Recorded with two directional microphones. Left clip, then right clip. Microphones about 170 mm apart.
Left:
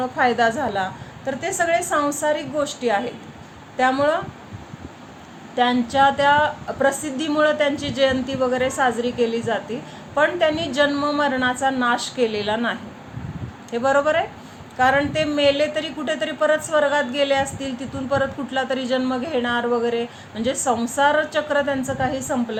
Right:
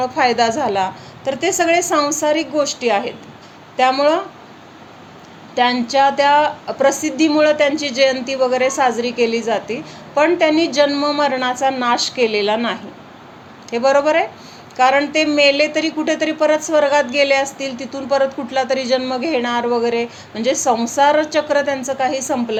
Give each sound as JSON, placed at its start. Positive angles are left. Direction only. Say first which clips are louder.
{"t": 0.0, "sound": "a woman's voice", "louder": "right 3 dB", "side_deg": -30}
{"t": 5.5, "sound": "a woman's voice", "louder": "right 3 dB", "side_deg": -30}